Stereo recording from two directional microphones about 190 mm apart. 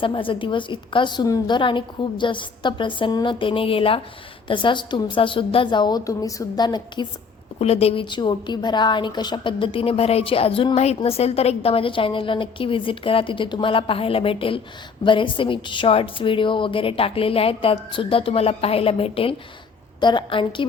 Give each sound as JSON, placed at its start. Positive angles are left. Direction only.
{"t": 0.0, "sound": "a woman's voice", "side_deg": 25}